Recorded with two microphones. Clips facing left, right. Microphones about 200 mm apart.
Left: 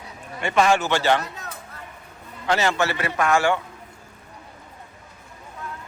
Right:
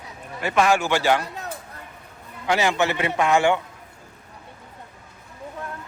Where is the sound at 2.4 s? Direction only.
15° right (ahead or behind).